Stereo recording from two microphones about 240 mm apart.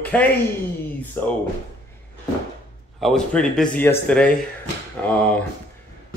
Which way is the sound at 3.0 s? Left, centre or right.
Centre.